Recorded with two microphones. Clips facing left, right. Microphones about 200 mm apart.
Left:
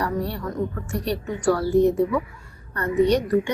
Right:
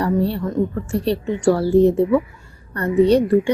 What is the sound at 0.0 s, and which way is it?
A woman's voice, 30° right (ahead or behind).